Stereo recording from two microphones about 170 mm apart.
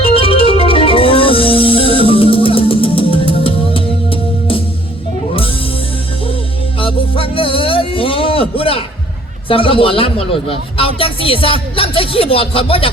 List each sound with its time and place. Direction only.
0.0 s music: 35° left (ahead or behind)
6.7 s music: 30° left (ahead or behind)
9.5 s a man's voice: 30° left (ahead or behind)